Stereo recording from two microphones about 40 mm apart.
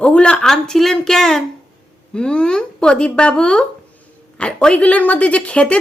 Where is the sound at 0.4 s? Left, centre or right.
Centre.